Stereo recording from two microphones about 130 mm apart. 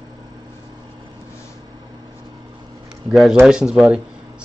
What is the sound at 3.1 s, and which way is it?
Speech, centre (ahead or behind).